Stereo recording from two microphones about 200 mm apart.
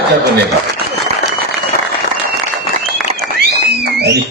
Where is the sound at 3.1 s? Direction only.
50° right (ahead or behind).